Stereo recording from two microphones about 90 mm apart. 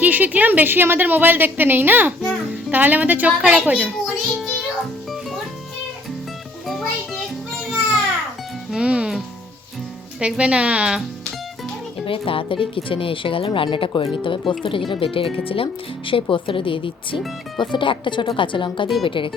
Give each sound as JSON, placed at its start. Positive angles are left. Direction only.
{"t": 0.0, "sound": "a woman's voice", "side_deg": -20}
{"t": 4.0, "sound": "music", "side_deg": 0}
{"t": 6.7, "sound": "music", "side_deg": 5}
{"t": 8.7, "sound": "music", "side_deg": -10}
{"t": 10.2, "sound": "a woman's voice", "side_deg": -10}
{"t": 12.0, "sound": "speech", "side_deg": 80}
{"t": 16.3, "sound": "speech", "side_deg": 75}